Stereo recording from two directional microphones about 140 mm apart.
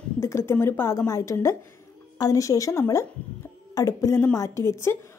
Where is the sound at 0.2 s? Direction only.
20° left (ahead or behind).